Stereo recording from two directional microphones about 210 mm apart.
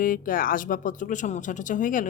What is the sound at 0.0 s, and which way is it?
A woman's voice, 40° left (ahead or behind).